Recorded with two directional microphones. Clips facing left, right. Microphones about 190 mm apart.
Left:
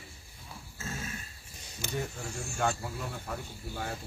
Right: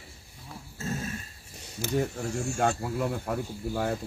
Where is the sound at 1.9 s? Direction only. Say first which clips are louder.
Right 8 dB; 50° right (ahead or behind).